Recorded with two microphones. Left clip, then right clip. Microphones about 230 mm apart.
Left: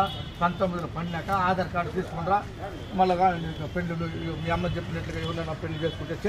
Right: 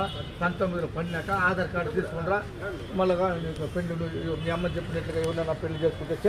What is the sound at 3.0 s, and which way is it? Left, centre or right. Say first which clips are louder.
Speech: left 3 dB; centre.